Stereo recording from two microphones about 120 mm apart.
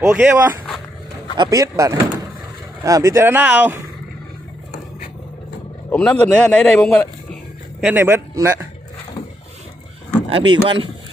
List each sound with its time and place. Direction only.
0.0 s speech: 20° right (ahead or behind)
1.4 s speech: 30° right (ahead or behind); by 3.8 s 15° right (ahead or behind)
5.9 s a man's voice: 10° left (ahead or behind)
7.8 s speech: 15° right (ahead or behind)
10.2 s speech: 45° right (ahead or behind)